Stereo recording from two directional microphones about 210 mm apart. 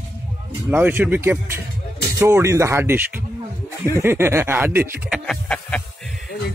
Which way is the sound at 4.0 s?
10° right (ahead or behind).